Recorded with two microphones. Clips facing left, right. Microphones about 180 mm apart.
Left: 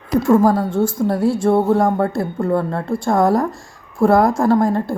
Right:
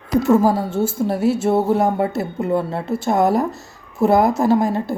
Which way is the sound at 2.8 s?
25° right (ahead or behind).